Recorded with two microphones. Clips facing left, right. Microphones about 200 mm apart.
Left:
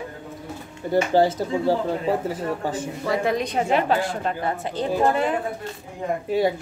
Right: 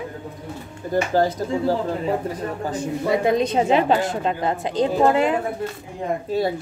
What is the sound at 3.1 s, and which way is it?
A woman's voice, 25° right (ahead or behind).